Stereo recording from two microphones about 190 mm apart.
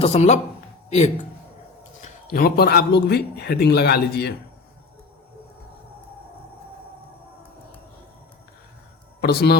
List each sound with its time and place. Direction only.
0.0 s a man's voice: 35° left (ahead or behind)
2.0 s a man's voice: 50° left (ahead or behind)
9.2 s a man's voice: 60° left (ahead or behind)